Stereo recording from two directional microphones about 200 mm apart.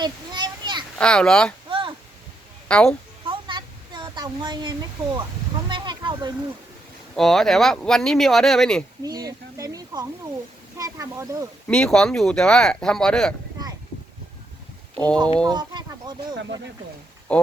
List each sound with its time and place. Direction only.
0.0 s a sound: 20° right (ahead or behind)
0.9 s speech: 5° left (ahead or behind)
2.6 s a woman's voice: 5° left (ahead or behind)
3.2 s a sound: 25° right (ahead or behind)
7.2 s speech: centre (ahead or behind)
9.0 s a sound: 20° right (ahead or behind)
10.8 s speech: 15° right (ahead or behind)
11.7 s speech: 5° left (ahead or behind)
13.6 s a sound: 20° right (ahead or behind)
14.9 s speech: 10° left (ahead or behind)
15.4 s speech: 20° right (ahead or behind)
17.3 s speech: 5° left (ahead or behind)